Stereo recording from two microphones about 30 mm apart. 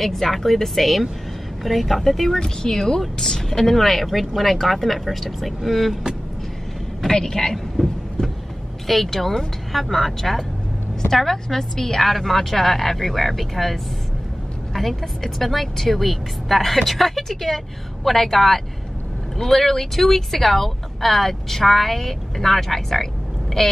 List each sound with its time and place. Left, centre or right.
0.0 s speech: centre
7.1 s a man's voice: centre
7.5 s a sound: centre
8.8 s speech: centre